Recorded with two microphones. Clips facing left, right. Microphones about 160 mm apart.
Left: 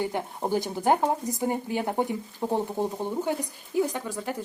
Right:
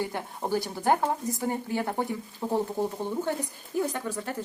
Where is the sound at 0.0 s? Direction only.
15° left (ahead or behind).